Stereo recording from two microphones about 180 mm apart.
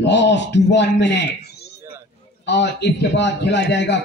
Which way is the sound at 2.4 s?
75° left (ahead or behind).